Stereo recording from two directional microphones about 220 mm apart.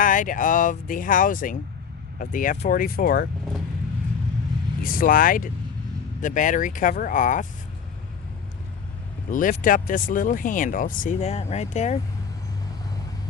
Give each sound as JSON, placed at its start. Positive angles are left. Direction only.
{"t": 0.0, "sound": "speech", "side_deg": 35}
{"t": 4.8, "sound": "speech", "side_deg": 40}
{"t": 9.3, "sound": "speech", "side_deg": 35}